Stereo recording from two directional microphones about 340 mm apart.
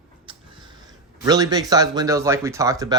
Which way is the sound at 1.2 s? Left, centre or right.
Centre.